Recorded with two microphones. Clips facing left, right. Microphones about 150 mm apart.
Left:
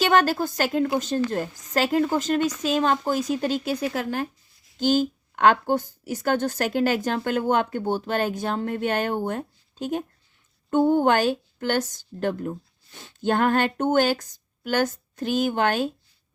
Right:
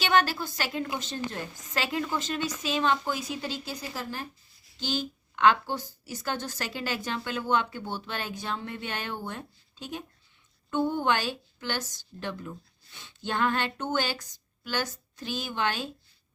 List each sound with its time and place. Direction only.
0.0 s a woman's voice: 45° left (ahead or behind); by 4.3 s 60° left (ahead or behind)
4.8 s a woman's voice: 45° left (ahead or behind)